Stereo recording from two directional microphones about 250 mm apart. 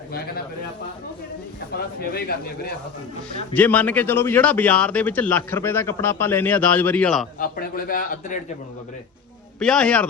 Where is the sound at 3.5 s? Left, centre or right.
Centre.